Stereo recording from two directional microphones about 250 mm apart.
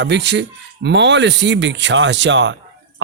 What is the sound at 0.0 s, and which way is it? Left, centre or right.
Speech, right.